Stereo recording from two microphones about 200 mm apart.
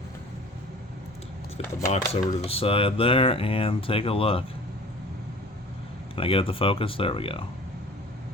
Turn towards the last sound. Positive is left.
turn(degrees=25)  # may be behind; listen again after turning